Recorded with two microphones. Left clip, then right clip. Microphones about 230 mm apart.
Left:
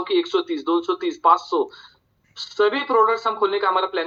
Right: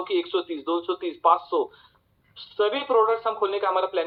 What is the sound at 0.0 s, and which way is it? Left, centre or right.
Speech, left.